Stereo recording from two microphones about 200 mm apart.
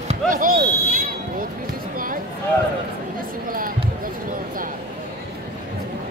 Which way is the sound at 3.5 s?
45° right (ahead or behind).